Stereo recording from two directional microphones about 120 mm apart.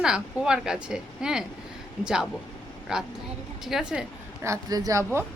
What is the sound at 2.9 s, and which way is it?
Speech, 5° right (ahead or behind).